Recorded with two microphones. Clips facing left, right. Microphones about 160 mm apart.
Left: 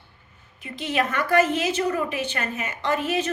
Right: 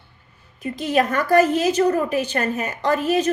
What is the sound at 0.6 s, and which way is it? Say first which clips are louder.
A woman's voice: right 5 dB; 40° right (ahead or behind).